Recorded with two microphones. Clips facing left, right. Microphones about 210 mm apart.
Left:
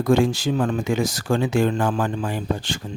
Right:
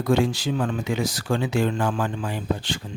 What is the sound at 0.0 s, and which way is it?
Speech, 45° left (ahead or behind).